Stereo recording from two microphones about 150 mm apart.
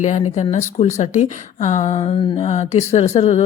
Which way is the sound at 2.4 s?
50° left (ahead or behind).